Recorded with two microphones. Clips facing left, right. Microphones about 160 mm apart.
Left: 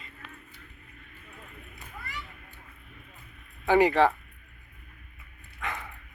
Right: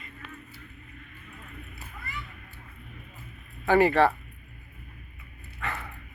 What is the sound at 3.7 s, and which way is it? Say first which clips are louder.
Speech: even; 15° left (ahead or behind).